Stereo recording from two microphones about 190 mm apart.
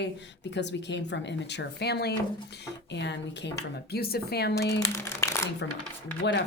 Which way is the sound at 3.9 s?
55° left (ahead or behind).